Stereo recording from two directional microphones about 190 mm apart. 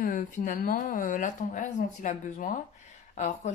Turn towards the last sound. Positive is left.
turn(degrees=40)  # may be behind; listen again after turning